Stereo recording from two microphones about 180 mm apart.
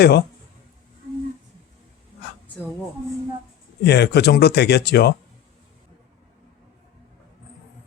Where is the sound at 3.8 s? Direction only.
65° left (ahead or behind).